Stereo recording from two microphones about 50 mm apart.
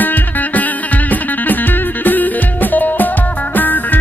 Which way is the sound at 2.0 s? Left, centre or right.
Left.